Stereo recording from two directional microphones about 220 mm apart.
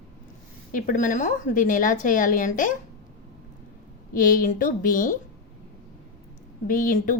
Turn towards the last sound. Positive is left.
turn(degrees=40)  # may be behind; listen again after turning